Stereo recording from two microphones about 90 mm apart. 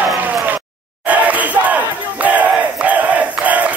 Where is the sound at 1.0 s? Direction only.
15° right (ahead or behind).